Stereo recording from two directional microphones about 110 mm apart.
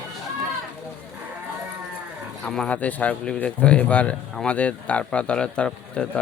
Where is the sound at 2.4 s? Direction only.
5° left (ahead or behind).